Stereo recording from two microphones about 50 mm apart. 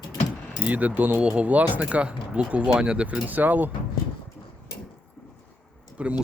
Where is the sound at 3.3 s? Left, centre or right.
Right.